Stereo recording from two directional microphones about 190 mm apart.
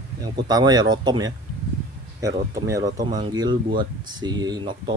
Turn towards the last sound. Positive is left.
turn(degrees=-25)  # may be behind; listen again after turning